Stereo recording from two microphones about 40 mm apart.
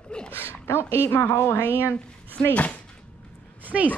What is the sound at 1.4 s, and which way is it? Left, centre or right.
Speech, left.